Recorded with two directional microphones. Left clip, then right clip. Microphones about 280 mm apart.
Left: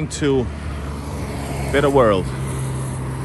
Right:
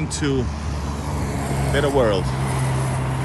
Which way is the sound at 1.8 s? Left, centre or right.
Centre.